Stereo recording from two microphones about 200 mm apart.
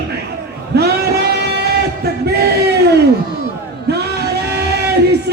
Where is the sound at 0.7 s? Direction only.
55° right (ahead or behind).